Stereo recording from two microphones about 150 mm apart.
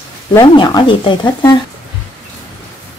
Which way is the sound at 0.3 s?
30° left (ahead or behind).